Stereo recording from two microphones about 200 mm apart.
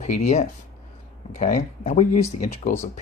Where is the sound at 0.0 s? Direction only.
35° left (ahead or behind).